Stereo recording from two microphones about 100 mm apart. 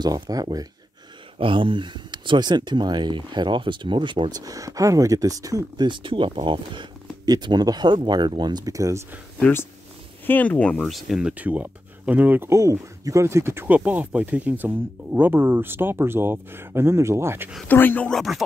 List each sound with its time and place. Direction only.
0.0 s speech: 40° right (ahead or behind)
1.4 s speech: 55° right (ahead or behind)
4.4 s speech: 35° right (ahead or behind)
5.9 s speech: 55° right (ahead or behind); by 9.0 s 35° right (ahead or behind)
9.4 s speech: 25° left (ahead or behind); by 13.7 s 25° right (ahead or behind)
13.7 s speech: 15° right (ahead or behind)
17.6 s speech: 20° left (ahead or behind)
18.1 s speech: centre (ahead or behind)